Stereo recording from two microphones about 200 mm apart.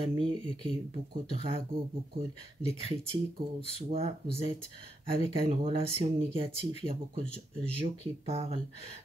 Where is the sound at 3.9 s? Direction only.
30° right (ahead or behind).